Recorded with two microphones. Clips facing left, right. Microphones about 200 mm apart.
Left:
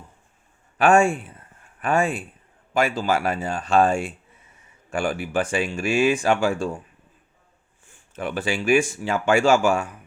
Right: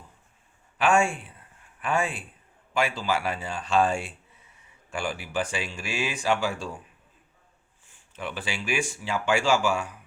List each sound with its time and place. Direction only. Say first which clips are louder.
0.8 s speech: left 6 dB; 45° left (ahead or behind)
8.1 s speech: left 8 dB; 50° left (ahead or behind)